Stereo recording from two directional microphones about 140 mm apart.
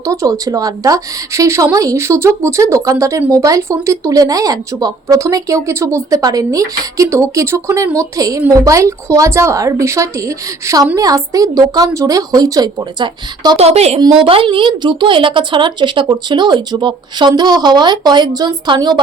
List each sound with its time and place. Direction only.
0.0 s speech: 25° right (ahead or behind)
13.6 s a woman's voice: 50° right (ahead or behind)
14.0 s a woman's voice: 40° right (ahead or behind)